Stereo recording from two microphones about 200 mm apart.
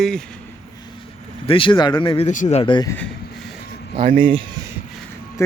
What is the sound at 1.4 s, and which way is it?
Speech, 25° left (ahead or behind).